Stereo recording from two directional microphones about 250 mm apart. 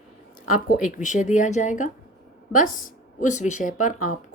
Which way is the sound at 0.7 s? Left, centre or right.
Left.